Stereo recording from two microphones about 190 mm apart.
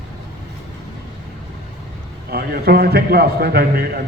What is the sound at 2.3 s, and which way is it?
A man's voice, 55° right (ahead or behind).